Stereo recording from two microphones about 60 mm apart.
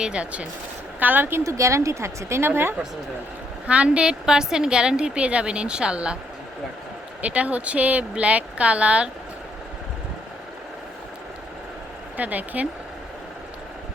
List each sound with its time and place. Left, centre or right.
0.0 s a woman's voice: centre
1.5 s a woman's voice: right
3.7 s a woman's voice: right
7.2 s speech: right
12.1 s speech: right